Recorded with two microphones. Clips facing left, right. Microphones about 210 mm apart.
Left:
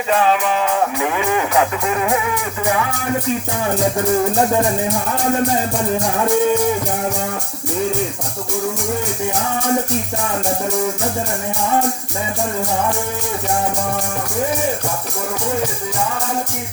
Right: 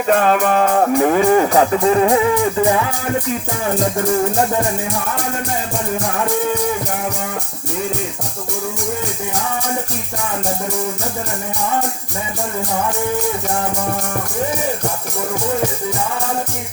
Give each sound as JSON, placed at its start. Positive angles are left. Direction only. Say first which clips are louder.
{"t": 0.1, "sound": "music", "louder": "right 2 dB", "side_deg": -50}